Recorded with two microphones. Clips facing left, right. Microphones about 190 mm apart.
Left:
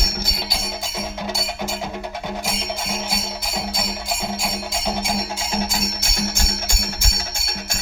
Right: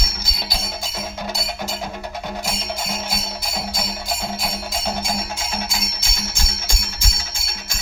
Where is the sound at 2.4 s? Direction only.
Centre (ahead or behind).